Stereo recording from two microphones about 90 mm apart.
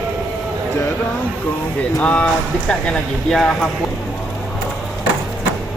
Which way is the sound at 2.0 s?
10° left (ahead or behind).